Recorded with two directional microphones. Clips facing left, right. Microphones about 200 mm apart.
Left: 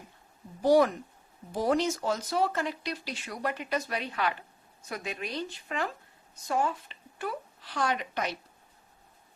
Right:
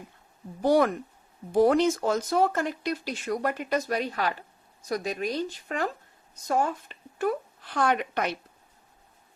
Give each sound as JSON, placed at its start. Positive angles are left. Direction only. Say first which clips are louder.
{"t": 0.6, "sound": "a woman's voice", "louder": "even", "side_deg": -55}